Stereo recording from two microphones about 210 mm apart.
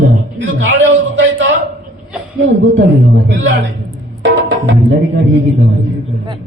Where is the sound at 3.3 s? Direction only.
65° right (ahead or behind).